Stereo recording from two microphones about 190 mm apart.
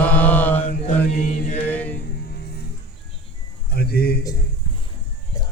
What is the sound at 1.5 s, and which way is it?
Music, 10° left (ahead or behind).